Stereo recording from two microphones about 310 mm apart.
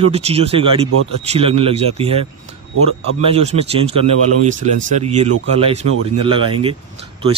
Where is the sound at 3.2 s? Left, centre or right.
Centre.